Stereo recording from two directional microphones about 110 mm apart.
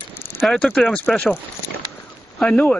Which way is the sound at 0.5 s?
5° left (ahead or behind).